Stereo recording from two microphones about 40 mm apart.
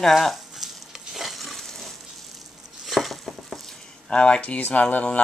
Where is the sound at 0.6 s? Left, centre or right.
Centre.